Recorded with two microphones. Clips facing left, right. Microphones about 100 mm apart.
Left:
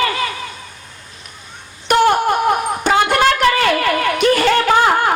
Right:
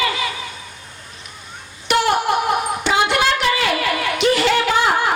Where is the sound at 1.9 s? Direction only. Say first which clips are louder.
Left 4 dB; 45° left (ahead or behind).